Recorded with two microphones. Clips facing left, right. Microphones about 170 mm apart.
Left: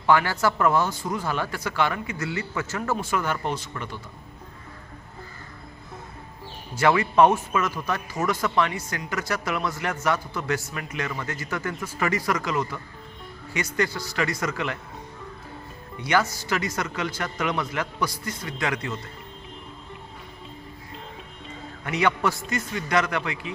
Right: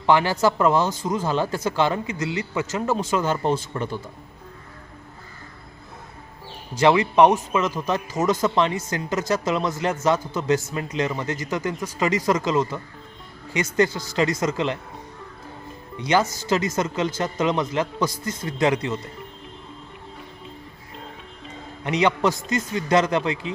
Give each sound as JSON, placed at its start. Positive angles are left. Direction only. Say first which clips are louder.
{"t": 0.0, "sound": "speech", "louder": "right 3 dB", "side_deg": -25}
{"t": 6.7, "sound": "speech", "louder": "right 3 dB", "side_deg": -20}
{"t": 16.0, "sound": "speech", "louder": "right 3 dB", "side_deg": -20}
{"t": 21.8, "sound": "speech", "louder": "right 3 dB", "side_deg": -20}